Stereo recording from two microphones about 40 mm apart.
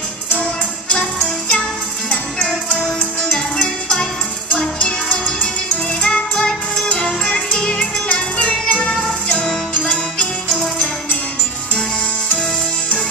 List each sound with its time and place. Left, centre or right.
0.3 s music: left
2.0 s music: centre
4.5 s music: left
7.5 s music: left
9.3 s music: centre